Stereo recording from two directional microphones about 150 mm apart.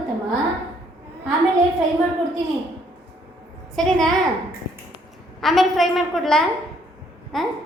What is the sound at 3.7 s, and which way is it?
Speech, 5° left (ahead or behind).